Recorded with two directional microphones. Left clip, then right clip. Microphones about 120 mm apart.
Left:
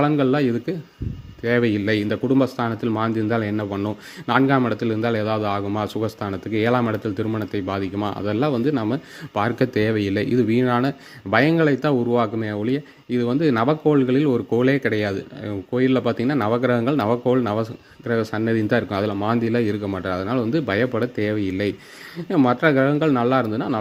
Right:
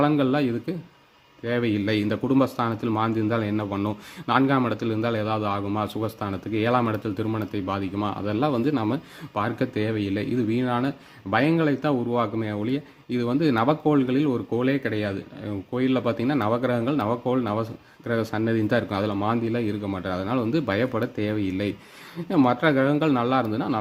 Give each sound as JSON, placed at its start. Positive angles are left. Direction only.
{"t": 0.1, "sound": "a man's voice", "side_deg": 25}
{"t": 9.3, "sound": "a man's voice", "side_deg": 45}